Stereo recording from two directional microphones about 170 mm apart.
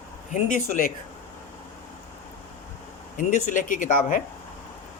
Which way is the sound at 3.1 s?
50° left (ahead or behind).